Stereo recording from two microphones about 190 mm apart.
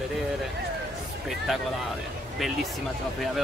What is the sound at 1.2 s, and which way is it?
Speech, centre (ahead or behind).